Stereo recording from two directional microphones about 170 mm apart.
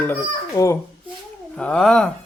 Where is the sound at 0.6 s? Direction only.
25° left (ahead or behind).